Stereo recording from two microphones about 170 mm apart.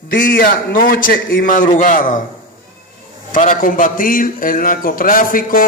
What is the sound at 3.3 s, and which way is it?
A man's voice, 50° left (ahead or behind).